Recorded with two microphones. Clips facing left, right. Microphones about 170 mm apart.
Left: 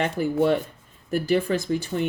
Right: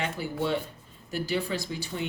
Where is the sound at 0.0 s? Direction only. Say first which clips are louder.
Left 8 dB; 50° left (ahead or behind).